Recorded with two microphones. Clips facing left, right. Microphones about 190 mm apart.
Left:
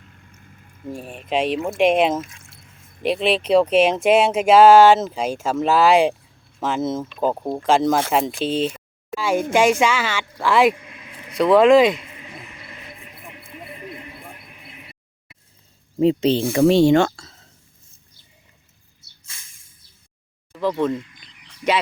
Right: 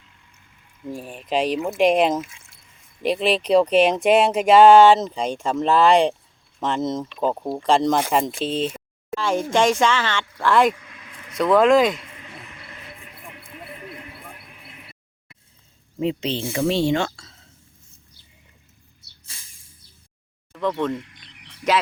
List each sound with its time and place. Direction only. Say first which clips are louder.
0.0 s a sound: left 7 dB; 50° left (ahead or behind)
0.9 s speech: left 1 dB; centre (ahead or behind)
10.8 s vehicle: left 3 dB; 20° left (ahead or behind)
11.3 s a sound: left 3 dB; centre (ahead or behind)
16.0 s speech: left 7 dB; 40° left (ahead or behind)
20.5 s speech: left 2 dB; 5° left (ahead or behind)